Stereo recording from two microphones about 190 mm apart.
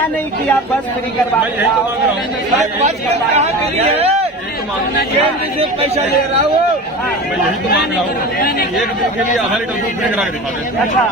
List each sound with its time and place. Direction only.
3.3 s speech: 35° right (ahead or behind)